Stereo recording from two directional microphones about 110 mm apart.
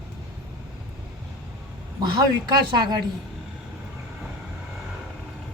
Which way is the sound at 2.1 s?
40° right (ahead or behind).